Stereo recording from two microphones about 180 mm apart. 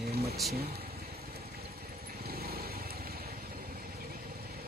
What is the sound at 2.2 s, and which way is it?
Vehicle, 60° right (ahead or behind).